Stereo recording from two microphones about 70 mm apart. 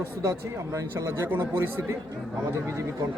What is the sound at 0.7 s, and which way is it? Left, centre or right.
Speech, right.